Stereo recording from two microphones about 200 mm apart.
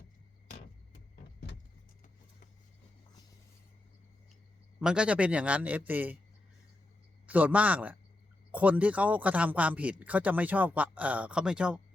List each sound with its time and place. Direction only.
4.8 s speech: 5° right (ahead or behind)
7.3 s speech: 10° right (ahead or behind)